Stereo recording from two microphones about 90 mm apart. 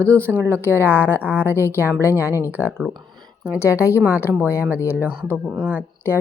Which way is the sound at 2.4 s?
20° right (ahead or behind).